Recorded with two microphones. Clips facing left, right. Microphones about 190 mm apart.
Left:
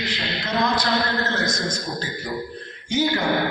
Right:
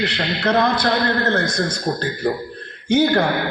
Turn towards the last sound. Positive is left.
turn(degrees=-60)  # may be behind; listen again after turning